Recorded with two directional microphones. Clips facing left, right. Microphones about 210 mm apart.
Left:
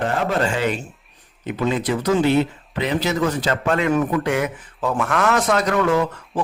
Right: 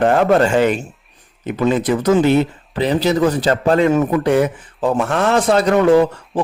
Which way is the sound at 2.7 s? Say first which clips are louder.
Right 5 dB; 35° right (ahead or behind).